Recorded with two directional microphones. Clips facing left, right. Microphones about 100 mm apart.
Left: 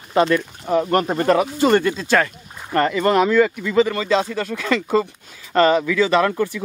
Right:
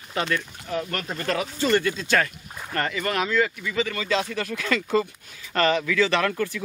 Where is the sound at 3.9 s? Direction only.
30° left (ahead or behind).